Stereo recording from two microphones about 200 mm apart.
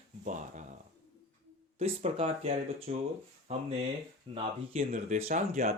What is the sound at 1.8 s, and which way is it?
Speech, 30° right (ahead or behind).